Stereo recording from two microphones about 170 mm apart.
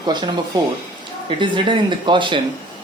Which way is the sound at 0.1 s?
25° right (ahead or behind).